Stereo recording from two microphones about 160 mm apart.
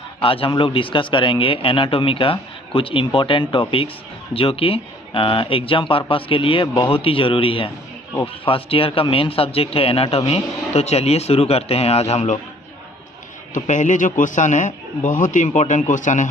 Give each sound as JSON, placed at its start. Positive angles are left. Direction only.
{"t": 0.2, "sound": "speech", "side_deg": 35}
{"t": 13.7, "sound": "a man's voice", "side_deg": 50}